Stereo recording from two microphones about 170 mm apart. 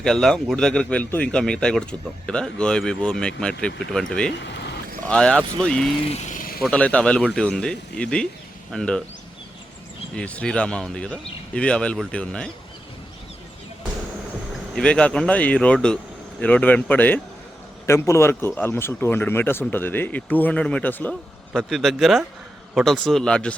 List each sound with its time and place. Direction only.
0.0 s speech: 5° left (ahead or behind)
4.4 s a sound: 85° left
5.0 s speech: 5° left (ahead or behind)
6.1 s vehicle: 40° left (ahead or behind)
6.6 s speech: 5° left (ahead or behind)
10.2 s speech: 5° left (ahead or behind)
14.8 s speech: 5° left (ahead or behind)